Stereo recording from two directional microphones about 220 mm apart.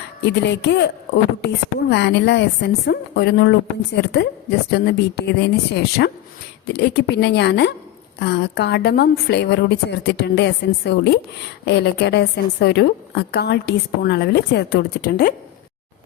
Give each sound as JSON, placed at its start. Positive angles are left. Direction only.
{"t": 0.3, "sound": "a woman's voice", "side_deg": 50}